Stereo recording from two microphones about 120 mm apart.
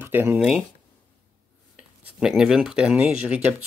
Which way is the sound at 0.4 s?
5° right (ahead or behind).